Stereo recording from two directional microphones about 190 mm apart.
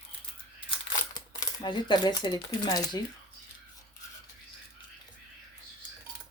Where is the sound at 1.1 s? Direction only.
20° left (ahead or behind).